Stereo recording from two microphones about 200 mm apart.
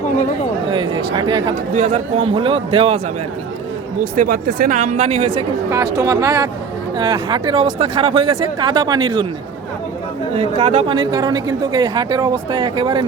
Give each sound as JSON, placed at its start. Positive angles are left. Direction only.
{"t": 0.7, "sound": "speech", "side_deg": -20}
{"t": 1.7, "sound": "speech", "side_deg": -35}
{"t": 4.1, "sound": "speech", "side_deg": -45}
{"t": 5.7, "sound": "speech", "side_deg": -15}
{"t": 10.3, "sound": "speech", "side_deg": -30}